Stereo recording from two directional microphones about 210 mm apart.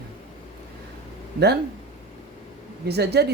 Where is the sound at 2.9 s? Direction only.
50° right (ahead or behind).